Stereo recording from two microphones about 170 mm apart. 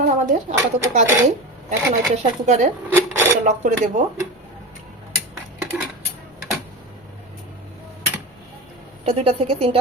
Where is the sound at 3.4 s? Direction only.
50° right (ahead or behind).